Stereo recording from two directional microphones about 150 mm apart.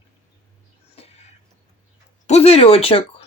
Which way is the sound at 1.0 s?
40° left (ahead or behind).